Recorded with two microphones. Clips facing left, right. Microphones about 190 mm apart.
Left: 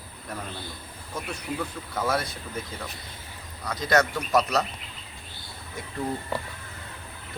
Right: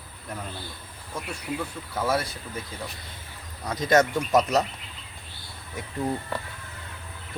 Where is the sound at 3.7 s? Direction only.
20° right (ahead or behind).